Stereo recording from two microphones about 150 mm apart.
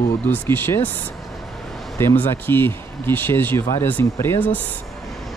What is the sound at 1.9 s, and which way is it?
Speech, 15° left (ahead or behind).